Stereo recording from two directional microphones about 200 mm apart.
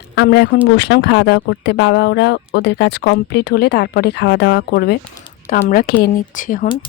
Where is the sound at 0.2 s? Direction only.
60° left (ahead or behind).